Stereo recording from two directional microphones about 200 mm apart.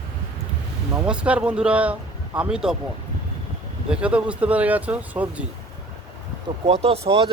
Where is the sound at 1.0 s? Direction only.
5° right (ahead or behind).